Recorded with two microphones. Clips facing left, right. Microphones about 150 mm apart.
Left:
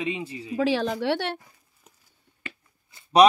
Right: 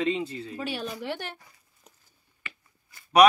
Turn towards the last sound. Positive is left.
turn(degrees=25)  # may be behind; listen again after turning